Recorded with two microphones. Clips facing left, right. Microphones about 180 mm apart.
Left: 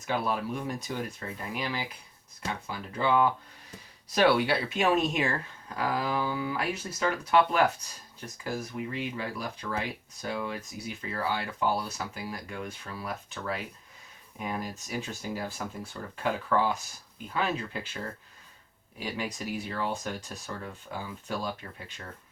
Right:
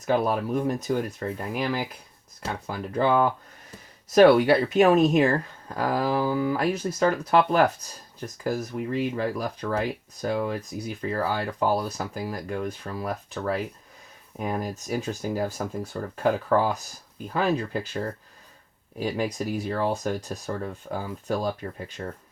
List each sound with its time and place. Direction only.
0.1 s speech: 45° right (ahead or behind)